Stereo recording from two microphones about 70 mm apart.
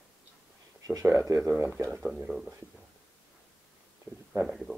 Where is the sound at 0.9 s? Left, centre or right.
Right.